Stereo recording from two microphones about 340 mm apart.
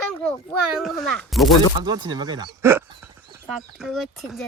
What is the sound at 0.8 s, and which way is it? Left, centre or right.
Speech, centre.